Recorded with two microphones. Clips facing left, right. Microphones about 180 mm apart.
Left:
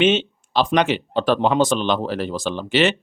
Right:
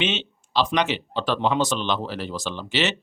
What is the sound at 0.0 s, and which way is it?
Speech, 50° left (ahead or behind).